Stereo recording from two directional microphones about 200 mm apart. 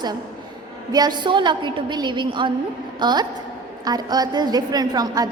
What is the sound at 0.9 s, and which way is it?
A woman's voice, 20° right (ahead or behind).